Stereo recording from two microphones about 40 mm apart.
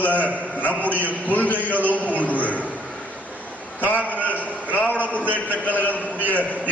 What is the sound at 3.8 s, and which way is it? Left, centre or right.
A man's voice, left.